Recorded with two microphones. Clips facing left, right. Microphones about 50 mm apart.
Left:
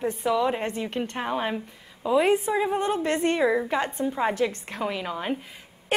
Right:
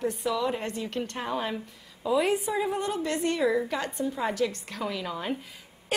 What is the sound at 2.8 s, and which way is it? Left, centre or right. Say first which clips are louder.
A woman's voice: left 4 dB; left.